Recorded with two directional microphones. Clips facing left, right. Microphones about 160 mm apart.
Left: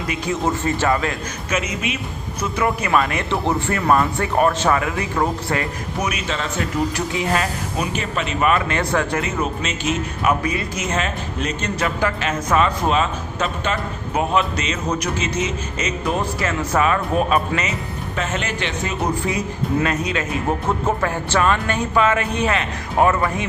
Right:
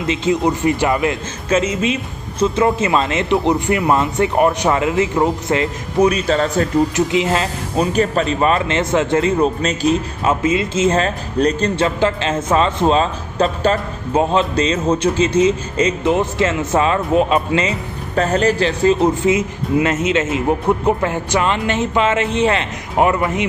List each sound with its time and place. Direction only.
0.1 s speech: 20° right (ahead or behind)
1.5 s a man's voice: 30° right (ahead or behind)
6.9 s a man's voice: 20° right (ahead or behind)
7.9 s a man's voice: 40° right (ahead or behind)
10.4 s a man's voice: 20° right (ahead or behind)
18.1 s a man's voice: 40° right (ahead or behind)
19.1 s a man's voice: 20° right (ahead or behind)